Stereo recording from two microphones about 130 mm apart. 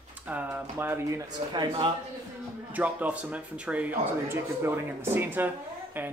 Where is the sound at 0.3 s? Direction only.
15° right (ahead or behind).